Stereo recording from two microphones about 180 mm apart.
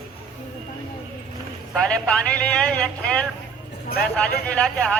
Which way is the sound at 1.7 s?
5° left (ahead or behind).